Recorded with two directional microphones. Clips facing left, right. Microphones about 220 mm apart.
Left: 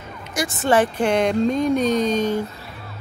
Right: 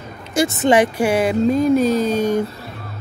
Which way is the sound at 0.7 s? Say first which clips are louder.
Right 2 dB; 10° right (ahead or behind).